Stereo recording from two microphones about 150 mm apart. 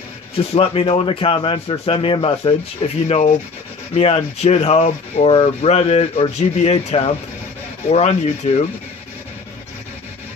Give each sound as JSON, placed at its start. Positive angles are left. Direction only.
{"t": 0.4, "sound": "speech", "side_deg": 40}
{"t": 3.1, "sound": "speech", "side_deg": 50}